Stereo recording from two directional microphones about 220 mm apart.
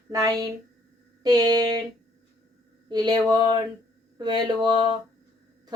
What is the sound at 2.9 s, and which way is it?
Speech, 20° right (ahead or behind).